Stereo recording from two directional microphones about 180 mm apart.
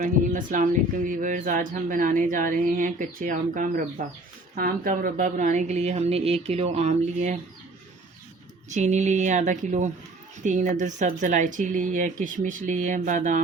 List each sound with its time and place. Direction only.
0.0 s a woman's voice: 45° right (ahead or behind)
8.7 s a woman's voice: 40° right (ahead or behind)